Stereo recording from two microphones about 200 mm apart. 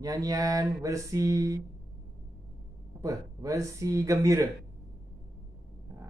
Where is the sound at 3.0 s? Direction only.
15° right (ahead or behind).